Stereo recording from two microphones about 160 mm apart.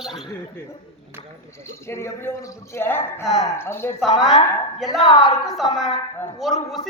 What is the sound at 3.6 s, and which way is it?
Speech, 15° left (ahead or behind).